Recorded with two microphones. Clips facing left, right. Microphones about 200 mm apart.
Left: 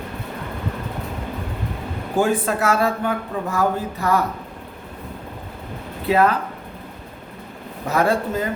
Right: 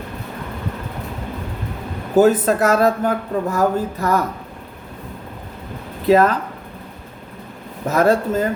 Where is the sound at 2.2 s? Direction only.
40° right (ahead or behind).